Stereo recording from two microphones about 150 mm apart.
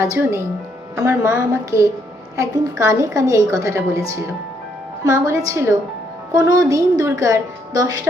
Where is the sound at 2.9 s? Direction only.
20° right (ahead or behind).